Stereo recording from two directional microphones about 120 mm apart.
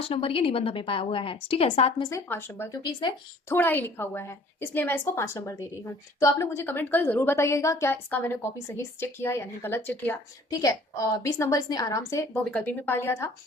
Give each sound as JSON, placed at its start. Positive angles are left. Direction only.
{"t": 0.0, "sound": "a woman's voice", "side_deg": 50}
{"t": 2.0, "sound": "a woman's voice", "side_deg": 30}
{"t": 2.2, "sound": "speech", "side_deg": 15}
{"t": 2.8, "sound": "speech", "side_deg": 40}
{"t": 3.5, "sound": "a woman's voice", "side_deg": 15}
{"t": 10.5, "sound": "a woman's voice", "side_deg": 30}
{"t": 12.5, "sound": "speech", "side_deg": 10}